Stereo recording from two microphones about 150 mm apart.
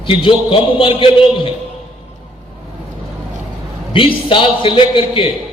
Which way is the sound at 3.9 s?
35° left (ahead or behind).